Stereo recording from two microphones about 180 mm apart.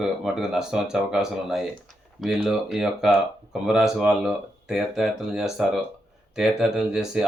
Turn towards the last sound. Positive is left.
turn(degrees=-5)  # may be behind; listen again after turning